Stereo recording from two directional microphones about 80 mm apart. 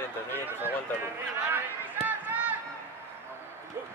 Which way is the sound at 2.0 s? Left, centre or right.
Right.